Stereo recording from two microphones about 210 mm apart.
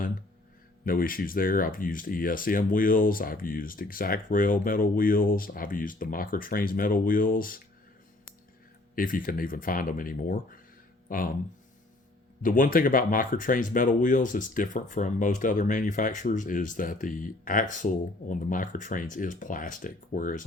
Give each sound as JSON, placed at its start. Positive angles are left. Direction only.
{"t": 0.9, "sound": "speech", "side_deg": 40}
{"t": 9.0, "sound": "speech", "side_deg": 40}
{"t": 12.4, "sound": "speech", "side_deg": 40}